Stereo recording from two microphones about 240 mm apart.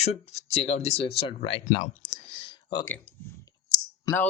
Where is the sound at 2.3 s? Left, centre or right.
Left.